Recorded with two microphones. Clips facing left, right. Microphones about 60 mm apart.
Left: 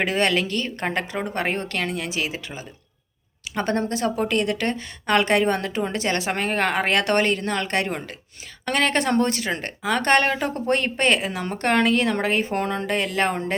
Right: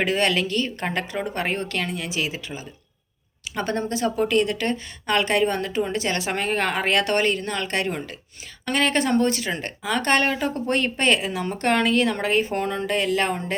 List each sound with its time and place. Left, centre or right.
0.0 s a woman's voice: left
3.5 s speech: left